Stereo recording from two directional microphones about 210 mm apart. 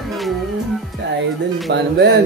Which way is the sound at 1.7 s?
55° right (ahead or behind).